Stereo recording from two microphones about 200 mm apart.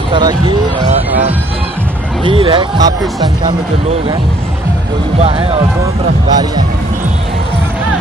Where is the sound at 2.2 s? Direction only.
25° right (ahead or behind).